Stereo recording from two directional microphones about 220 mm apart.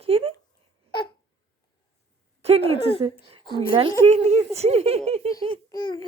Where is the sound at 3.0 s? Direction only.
20° right (ahead or behind).